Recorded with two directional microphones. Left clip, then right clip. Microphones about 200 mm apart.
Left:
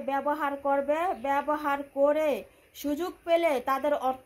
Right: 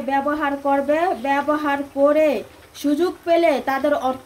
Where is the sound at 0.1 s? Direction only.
25° left (ahead or behind).